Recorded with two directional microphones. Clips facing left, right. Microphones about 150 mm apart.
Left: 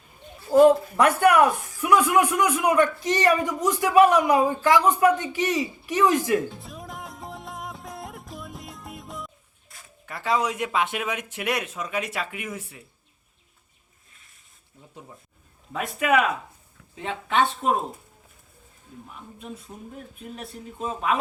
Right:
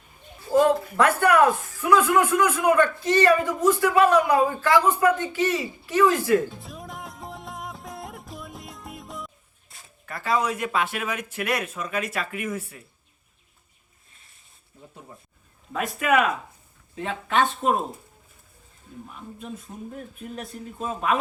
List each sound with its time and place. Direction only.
0.5 s a man's voice: 15° left (ahead or behind)
6.6 s music: centre (ahead or behind)
10.1 s a man's voice: 15° left (ahead or behind)
15.7 s a man's voice: 15° left (ahead or behind)
20.3 s a man's voice: 10° left (ahead or behind)